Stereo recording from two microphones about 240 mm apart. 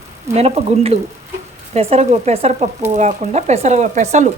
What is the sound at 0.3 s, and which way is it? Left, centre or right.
Speech, right.